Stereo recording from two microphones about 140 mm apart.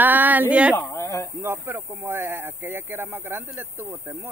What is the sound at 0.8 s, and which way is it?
Speech, 20° left (ahead or behind).